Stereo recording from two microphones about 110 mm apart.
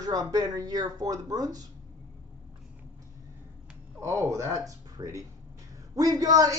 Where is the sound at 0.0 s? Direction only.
35° right (ahead or behind).